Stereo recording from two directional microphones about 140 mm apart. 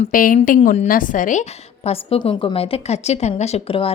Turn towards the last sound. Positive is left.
turn(degrees=45)  # may be behind; listen again after turning